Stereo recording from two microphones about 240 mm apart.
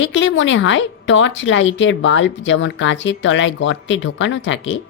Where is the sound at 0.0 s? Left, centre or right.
Left.